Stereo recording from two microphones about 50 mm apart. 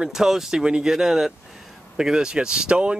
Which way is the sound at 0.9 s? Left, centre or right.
Centre.